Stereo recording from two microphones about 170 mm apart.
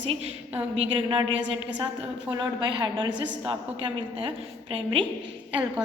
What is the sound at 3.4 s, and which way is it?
Speech, 30° right (ahead or behind).